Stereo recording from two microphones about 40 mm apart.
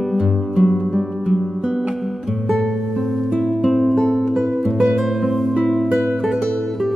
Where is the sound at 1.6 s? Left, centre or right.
Right.